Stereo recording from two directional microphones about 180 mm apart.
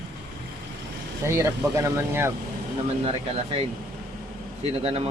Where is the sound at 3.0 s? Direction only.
30° right (ahead or behind).